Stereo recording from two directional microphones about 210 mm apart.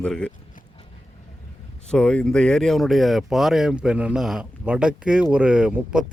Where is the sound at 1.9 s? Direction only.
5° left (ahead or behind).